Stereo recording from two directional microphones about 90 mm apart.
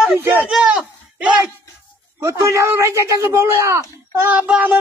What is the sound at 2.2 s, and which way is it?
A man's voice, 35° right (ahead or behind).